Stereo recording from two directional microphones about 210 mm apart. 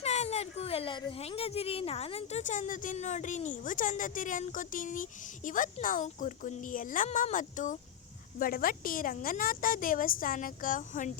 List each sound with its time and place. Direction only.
0.0 s speech: 30° left (ahead or behind)